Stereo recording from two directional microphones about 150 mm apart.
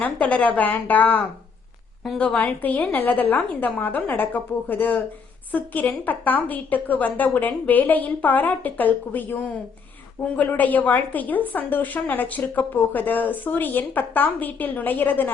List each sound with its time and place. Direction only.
0.0 s a woman's voice: 10° left (ahead or behind)